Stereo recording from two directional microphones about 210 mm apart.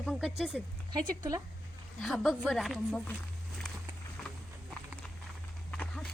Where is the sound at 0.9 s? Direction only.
15° right (ahead or behind).